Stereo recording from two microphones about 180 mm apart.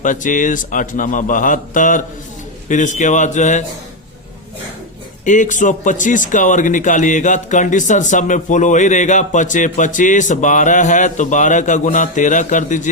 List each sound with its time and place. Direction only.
0.0 s speech: 45° left (ahead or behind)
5.2 s speech: 45° left (ahead or behind)